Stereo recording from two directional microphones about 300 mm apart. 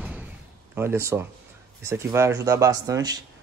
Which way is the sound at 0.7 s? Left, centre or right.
Centre.